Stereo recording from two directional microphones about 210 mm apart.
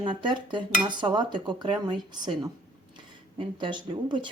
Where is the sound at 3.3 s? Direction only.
25° right (ahead or behind).